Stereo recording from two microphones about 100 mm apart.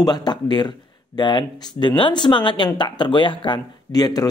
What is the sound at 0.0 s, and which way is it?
Speech, 45° left (ahead or behind).